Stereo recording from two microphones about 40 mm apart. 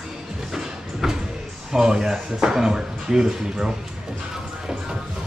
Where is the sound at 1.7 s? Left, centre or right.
Centre.